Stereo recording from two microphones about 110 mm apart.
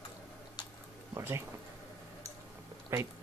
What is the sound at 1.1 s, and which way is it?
Speech, 25° right (ahead or behind).